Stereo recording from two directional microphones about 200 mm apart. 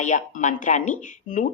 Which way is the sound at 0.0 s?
40° left (ahead or behind).